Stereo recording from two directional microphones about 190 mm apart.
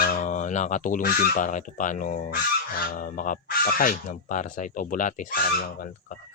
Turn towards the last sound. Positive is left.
turn(degrees=50)  # may be behind; listen again after turning